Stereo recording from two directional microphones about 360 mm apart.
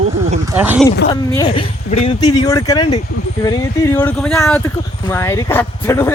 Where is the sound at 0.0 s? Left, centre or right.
Centre.